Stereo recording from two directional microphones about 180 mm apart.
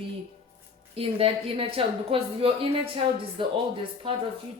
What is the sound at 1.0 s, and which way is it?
A woman's voice, 30° right (ahead or behind).